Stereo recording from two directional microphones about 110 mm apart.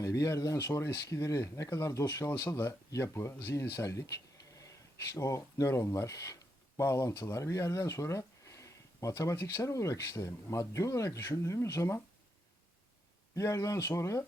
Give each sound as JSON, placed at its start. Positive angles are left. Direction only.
{"t": 0.0, "sound": "speech", "side_deg": 30}
{"t": 13.3, "sound": "speech", "side_deg": 30}